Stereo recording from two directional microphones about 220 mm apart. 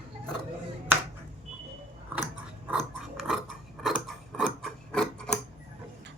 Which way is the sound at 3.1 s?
Centre (ahead or behind).